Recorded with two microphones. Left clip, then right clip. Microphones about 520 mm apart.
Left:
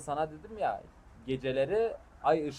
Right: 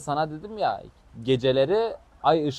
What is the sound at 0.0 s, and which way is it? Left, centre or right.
Speech, centre.